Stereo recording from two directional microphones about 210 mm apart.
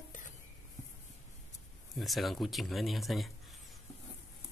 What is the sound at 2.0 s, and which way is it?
Speech, centre (ahead or behind).